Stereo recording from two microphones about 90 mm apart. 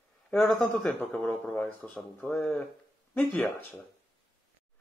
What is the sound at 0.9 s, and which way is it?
Speech, 20° left (ahead or behind).